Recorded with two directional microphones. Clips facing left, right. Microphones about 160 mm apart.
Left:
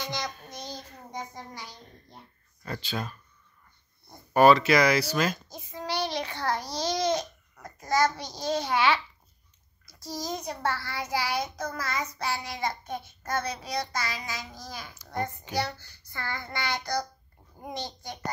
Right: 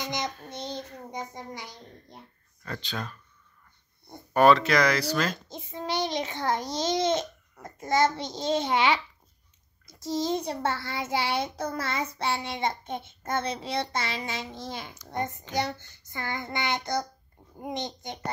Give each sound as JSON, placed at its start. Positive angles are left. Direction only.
{"t": 0.0, "sound": "child singing", "side_deg": -20}
{"t": 1.3, "sound": "a child's voice", "side_deg": -20}
{"t": 2.6, "sound": "speech", "side_deg": 10}
{"t": 4.3, "sound": "speech", "side_deg": 5}
{"t": 5.5, "sound": "a child's voice", "side_deg": -25}